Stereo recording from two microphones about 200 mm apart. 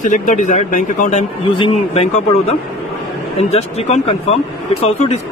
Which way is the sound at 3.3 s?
30° left (ahead or behind).